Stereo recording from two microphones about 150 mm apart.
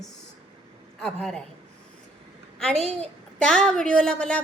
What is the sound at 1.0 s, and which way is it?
Speech, 5° left (ahead or behind).